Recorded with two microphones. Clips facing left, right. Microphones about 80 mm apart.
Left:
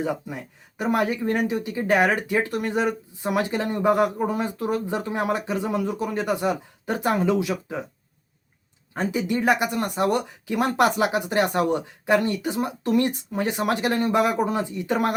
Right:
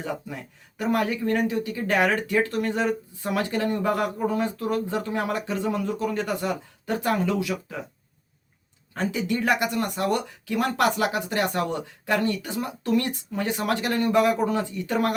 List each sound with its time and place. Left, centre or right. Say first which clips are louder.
0.0 s speech: left 4 dB; centre
9.0 s speech: left 2 dB; centre